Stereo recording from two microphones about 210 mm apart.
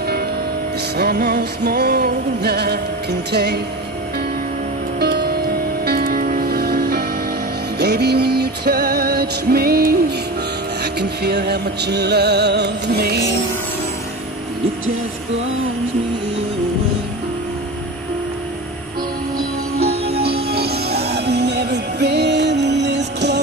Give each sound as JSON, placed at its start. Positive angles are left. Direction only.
{"t": 0.9, "sound": "music", "side_deg": -50}
{"t": 5.0, "sound": "music", "side_deg": -50}
{"t": 19.8, "sound": "music", "side_deg": -30}
{"t": 20.5, "sound": "music", "side_deg": -50}